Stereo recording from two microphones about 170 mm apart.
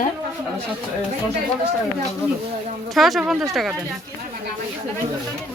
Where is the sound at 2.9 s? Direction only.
Centre (ahead or behind).